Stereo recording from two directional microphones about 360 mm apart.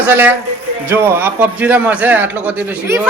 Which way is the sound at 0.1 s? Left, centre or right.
Centre.